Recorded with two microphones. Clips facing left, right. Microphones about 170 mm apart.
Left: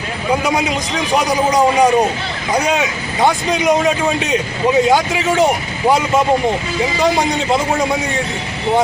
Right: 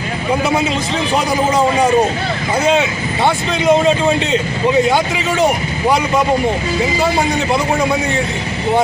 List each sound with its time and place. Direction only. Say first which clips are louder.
1.1 s speech: left 1 dB; 15° left (ahead or behind)